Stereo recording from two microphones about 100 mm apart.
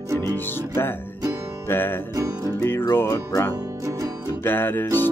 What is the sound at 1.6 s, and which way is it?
Music, 20° left (ahead or behind).